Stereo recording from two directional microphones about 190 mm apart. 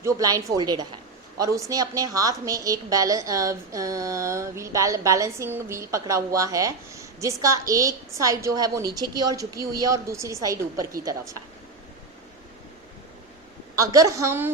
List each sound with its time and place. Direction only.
0.0 s a woman's voice: 15° right (ahead or behind)
13.7 s a woman's voice: 15° right (ahead or behind)